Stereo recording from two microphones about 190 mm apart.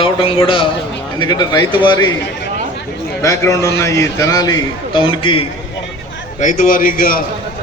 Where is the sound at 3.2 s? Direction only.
15° left (ahead or behind).